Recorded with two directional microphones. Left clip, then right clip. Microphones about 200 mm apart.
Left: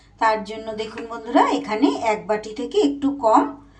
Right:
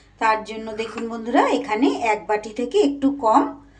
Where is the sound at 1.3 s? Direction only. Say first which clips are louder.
Even; 25° right (ahead or behind).